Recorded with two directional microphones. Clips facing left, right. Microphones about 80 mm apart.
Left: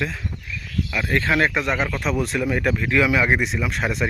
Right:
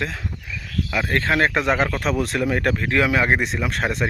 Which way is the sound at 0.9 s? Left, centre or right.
Right.